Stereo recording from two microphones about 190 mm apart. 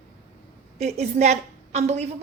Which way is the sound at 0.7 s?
35° right (ahead or behind).